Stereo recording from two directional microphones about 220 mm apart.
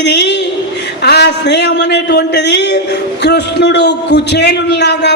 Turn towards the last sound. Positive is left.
turn(degrees=50)  # may be behind; listen again after turning